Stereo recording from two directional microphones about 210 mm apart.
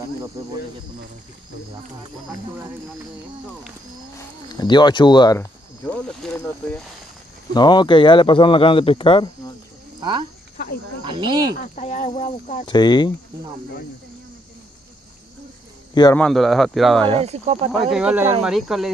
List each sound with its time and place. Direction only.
4.6 s speech: 20° left (ahead or behind)
7.5 s speech: 20° left (ahead or behind)
9.9 s speech: 20° right (ahead or behind)
11.5 s speech: 35° left (ahead or behind)
12.6 s speech: 20° left (ahead or behind)
15.9 s a man's voice: 20° left (ahead or behind)
16.2 s speech: centre (ahead or behind)
17.2 s speech: 30° right (ahead or behind)
17.9 s speech: 5° right (ahead or behind)